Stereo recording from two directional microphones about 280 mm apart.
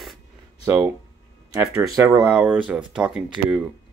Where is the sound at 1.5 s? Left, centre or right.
Centre.